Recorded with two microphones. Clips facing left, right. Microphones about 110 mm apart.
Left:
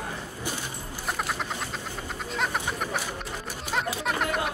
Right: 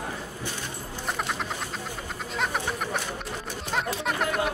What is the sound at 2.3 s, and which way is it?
Chicken, centre (ahead or behind).